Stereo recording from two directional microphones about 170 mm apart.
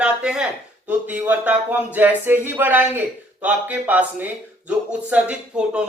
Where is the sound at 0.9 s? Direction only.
10° right (ahead or behind).